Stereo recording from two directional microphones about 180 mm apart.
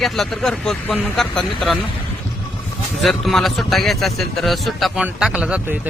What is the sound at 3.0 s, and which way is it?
A man's voice, centre (ahead or behind).